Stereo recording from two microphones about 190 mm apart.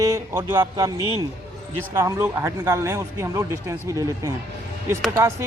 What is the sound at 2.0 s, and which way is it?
A man's voice, 15° right (ahead or behind).